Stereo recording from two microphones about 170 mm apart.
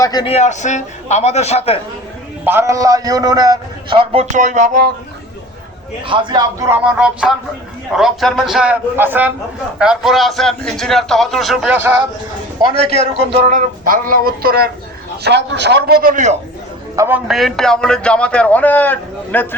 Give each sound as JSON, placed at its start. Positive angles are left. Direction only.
{"t": 0.0, "sound": "a man's voice", "side_deg": 25}
{"t": 0.3, "sound": "a man's voice", "side_deg": 45}
{"t": 2.4, "sound": "a man's voice", "side_deg": -15}
{"t": 4.4, "sound": "a sound", "side_deg": -45}
{"t": 6.1, "sound": "a man's voice", "side_deg": -30}
{"t": 6.7, "sound": "a man's voice", "side_deg": -5}
{"t": 12.8, "sound": "speech", "side_deg": 65}
{"t": 13.3, "sound": "a sound", "side_deg": -50}
{"t": 15.2, "sound": "a man's voice", "side_deg": -90}
{"t": 16.9, "sound": "a man's voice", "side_deg": -15}